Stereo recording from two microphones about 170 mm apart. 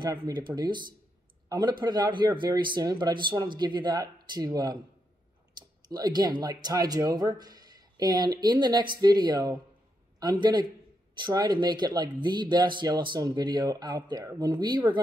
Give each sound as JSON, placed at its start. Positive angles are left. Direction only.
{"t": 0.0, "sound": "a man's voice", "side_deg": -25}